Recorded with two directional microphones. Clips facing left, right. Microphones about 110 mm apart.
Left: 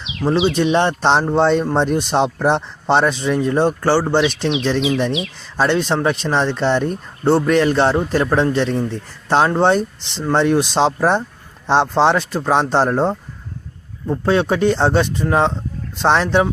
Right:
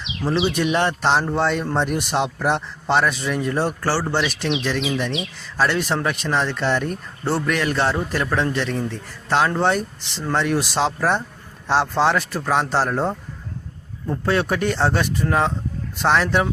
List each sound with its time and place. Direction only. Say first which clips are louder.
0.3 s speech: left 5 dB; 25° left (ahead or behind)
5.5 s speech: left 4 dB; 25° left (ahead or behind)